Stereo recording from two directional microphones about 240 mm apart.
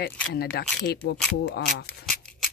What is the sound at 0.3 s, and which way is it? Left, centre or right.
Speech, left.